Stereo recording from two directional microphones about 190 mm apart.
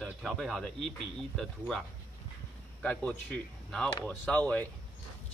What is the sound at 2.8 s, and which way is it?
Speech, 5° left (ahead or behind).